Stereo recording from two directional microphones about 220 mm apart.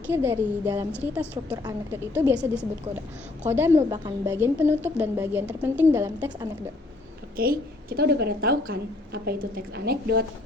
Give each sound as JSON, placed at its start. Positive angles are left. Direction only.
{"t": 0.1, "sound": "a woman's voice", "side_deg": -10}
{"t": 3.5, "sound": "a woman's voice", "side_deg": -10}
{"t": 7.3, "sound": "a woman's voice", "side_deg": -40}